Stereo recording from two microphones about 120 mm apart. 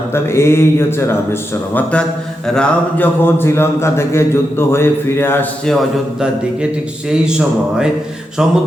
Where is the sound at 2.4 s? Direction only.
5° left (ahead or behind).